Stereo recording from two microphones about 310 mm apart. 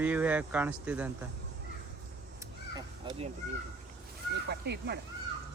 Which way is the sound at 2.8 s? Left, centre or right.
Centre.